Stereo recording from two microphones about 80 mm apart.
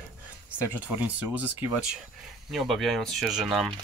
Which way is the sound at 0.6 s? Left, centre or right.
Right.